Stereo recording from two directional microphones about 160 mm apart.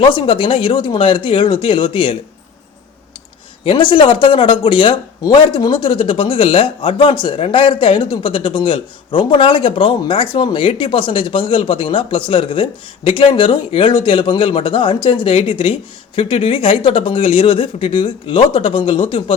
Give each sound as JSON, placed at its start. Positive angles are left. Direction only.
{"t": 0.0, "sound": "speech", "side_deg": 30}
{"t": 3.6, "sound": "speech", "side_deg": 35}